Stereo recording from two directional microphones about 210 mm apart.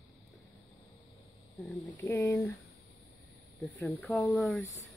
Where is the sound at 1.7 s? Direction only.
10° left (ahead or behind).